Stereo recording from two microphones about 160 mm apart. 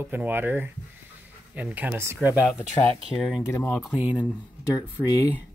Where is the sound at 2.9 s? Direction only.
Centre (ahead or behind).